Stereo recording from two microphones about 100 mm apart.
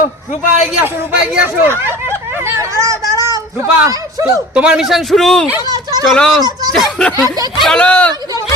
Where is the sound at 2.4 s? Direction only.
30° right (ahead or behind).